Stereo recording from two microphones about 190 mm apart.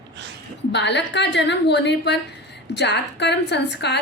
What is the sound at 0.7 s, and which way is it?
A woman's voice, 65° left (ahead or behind).